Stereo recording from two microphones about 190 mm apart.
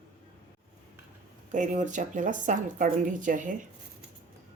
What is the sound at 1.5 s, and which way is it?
A woman's voice, 40° right (ahead or behind).